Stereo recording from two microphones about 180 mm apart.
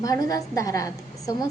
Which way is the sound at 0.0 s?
20° left (ahead or behind).